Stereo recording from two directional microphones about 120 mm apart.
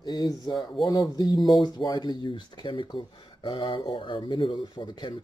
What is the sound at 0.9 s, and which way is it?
Speech, 30° left (ahead or behind).